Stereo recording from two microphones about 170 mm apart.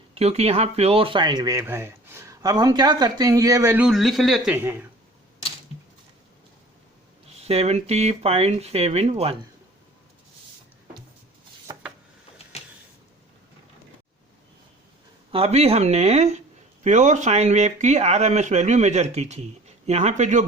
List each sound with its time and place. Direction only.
0.1 s speech: 40° right (ahead or behind); by 3.8 s 15° right (ahead or behind)
3.8 s speech: centre (ahead or behind)
4.5 s speech: 10° right (ahead or behind)
7.4 s speech: 35° right (ahead or behind)
11.7 s a sound: 25° right (ahead or behind)
15.3 s speech: 35° right (ahead or behind)